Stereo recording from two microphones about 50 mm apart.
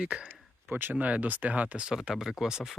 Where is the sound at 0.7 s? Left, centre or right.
Right.